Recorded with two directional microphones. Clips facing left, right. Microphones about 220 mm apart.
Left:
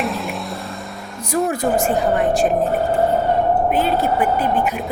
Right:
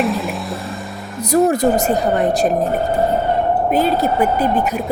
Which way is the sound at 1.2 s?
40° right (ahead or behind).